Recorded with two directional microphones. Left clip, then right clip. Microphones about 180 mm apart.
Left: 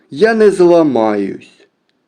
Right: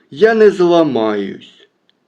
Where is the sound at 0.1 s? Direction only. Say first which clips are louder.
Even; 45° left (ahead or behind).